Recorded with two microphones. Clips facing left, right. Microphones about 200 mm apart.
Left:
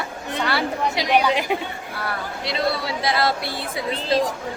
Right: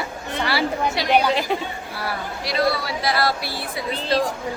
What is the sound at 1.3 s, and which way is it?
Speech, 15° left (ahead or behind).